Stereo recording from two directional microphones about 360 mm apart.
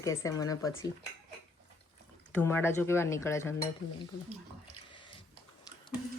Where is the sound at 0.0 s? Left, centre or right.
Centre.